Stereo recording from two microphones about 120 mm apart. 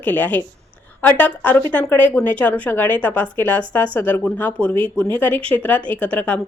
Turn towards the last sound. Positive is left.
turn(degrees=15)  # may be behind; listen again after turning